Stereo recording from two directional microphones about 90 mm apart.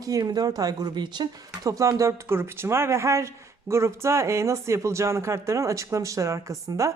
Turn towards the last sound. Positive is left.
turn(degrees=-35)  # may be behind; listen again after turning